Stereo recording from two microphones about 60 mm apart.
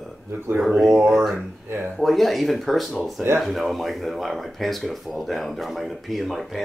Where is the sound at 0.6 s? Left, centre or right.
Centre.